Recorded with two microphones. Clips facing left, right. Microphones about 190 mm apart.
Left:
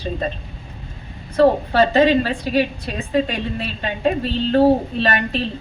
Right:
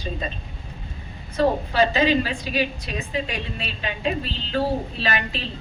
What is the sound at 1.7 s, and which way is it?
Speech, 60° left (ahead or behind).